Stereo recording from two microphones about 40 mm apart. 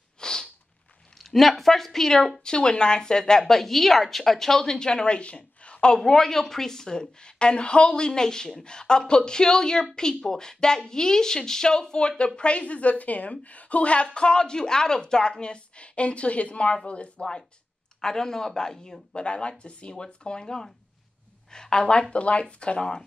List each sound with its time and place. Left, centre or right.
0.2 s sniff: centre
1.1 s a woman's voice: centre; by 5.9 s left
5.9 s a woman's voice: centre; by 14.0 s left
14.0 s speech: left
18.0 s a woman's voice: centre
19.2 s speech: left
22.1 s speech: left